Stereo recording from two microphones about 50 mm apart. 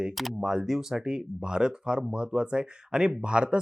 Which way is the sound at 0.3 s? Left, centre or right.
Centre.